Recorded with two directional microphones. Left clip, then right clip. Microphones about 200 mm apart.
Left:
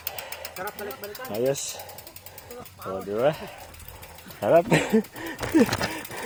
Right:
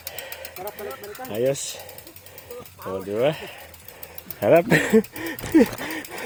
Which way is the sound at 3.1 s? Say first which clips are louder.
Right 1 dB; 30° right (ahead or behind).